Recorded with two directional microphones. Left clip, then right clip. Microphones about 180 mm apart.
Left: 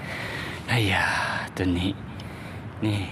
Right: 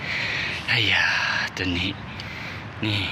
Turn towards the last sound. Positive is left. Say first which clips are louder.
# right 4 dB
turn(degrees=10)  # may be behind; listen again after turning